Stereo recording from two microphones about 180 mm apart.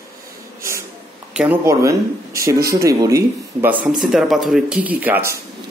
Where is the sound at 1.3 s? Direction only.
15° right (ahead or behind).